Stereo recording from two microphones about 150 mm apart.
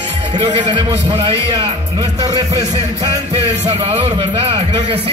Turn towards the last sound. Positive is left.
turn(degrees=-40)  # may be behind; listen again after turning